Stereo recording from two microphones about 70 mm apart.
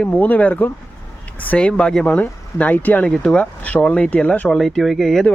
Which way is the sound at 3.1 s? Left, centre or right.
Centre.